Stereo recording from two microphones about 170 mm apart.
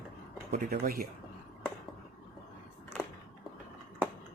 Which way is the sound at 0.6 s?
60° right (ahead or behind).